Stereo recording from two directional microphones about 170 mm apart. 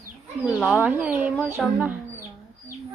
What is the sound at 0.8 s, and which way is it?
Speech, 10° right (ahead or behind).